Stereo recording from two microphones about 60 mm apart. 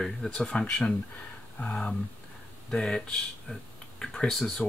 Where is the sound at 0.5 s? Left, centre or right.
Centre.